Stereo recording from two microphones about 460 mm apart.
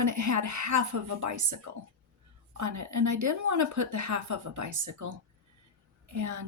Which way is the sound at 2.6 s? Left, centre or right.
Right.